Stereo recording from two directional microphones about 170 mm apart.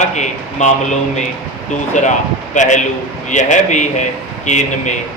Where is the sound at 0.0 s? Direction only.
45° left (ahead or behind).